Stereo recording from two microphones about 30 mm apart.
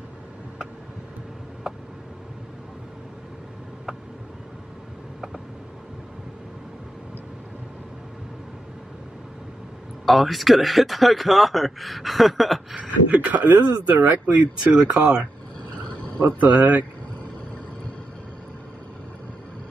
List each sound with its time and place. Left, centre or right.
10.0 s speech: centre
12.7 s speech: right
13.9 s speech: right
16.3 s speech: right
16.5 s speech: right